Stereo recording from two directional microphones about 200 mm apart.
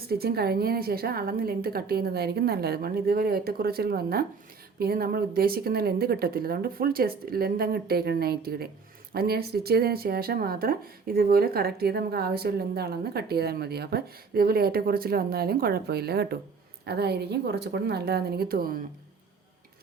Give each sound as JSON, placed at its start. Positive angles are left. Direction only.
{"t": 0.1, "sound": "speech", "side_deg": -50}